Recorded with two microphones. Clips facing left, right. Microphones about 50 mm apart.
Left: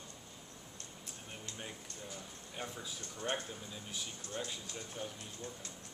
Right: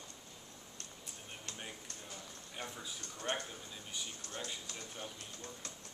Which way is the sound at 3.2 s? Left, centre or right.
Centre.